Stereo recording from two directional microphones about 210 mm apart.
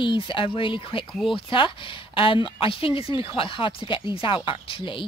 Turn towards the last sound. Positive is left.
turn(degrees=25)  # may be behind; listen again after turning